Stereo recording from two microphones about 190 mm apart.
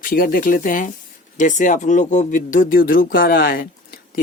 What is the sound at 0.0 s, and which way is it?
Speech, 50° left (ahead or behind).